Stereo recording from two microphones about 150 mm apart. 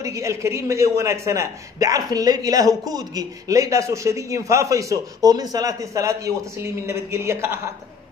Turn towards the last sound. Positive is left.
turn(degrees=-15)  # may be behind; listen again after turning